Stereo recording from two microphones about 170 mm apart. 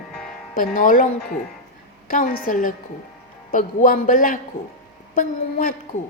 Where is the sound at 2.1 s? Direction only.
55° left (ahead or behind).